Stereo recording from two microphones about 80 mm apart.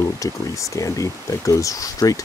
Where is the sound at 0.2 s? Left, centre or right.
Left.